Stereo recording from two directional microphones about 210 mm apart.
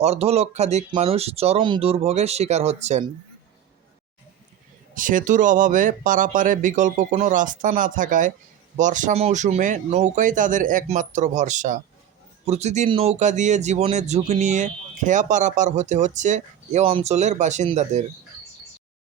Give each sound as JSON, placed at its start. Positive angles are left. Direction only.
{"t": 0.0, "sound": "speech", "side_deg": -30}
{"t": 4.9, "sound": "speech", "side_deg": -40}